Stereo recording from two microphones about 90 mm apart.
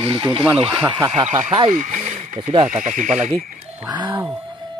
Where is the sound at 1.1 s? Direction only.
90° right.